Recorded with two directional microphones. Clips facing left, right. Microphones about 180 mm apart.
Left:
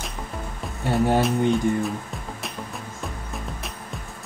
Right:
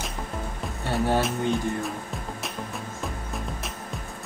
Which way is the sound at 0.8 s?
15° left (ahead or behind).